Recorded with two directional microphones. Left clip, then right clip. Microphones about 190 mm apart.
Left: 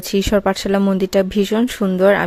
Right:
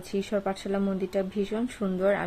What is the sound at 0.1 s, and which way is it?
Speech, 55° left (ahead or behind).